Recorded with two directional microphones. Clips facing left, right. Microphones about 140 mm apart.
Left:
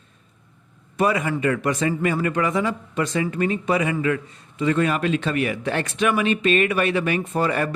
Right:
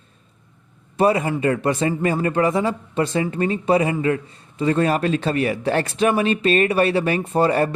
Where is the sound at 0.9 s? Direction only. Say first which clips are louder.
Right 3 dB; 30° right (ahead or behind).